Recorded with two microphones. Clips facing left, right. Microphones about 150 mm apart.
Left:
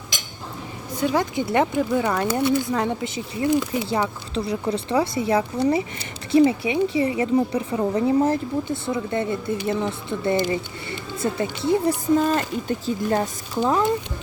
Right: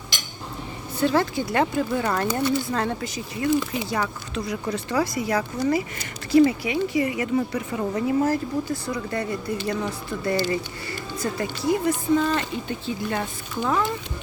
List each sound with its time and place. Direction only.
0.9 s speech: 15° left (ahead or behind)
12.1 s speech: 40° left (ahead or behind)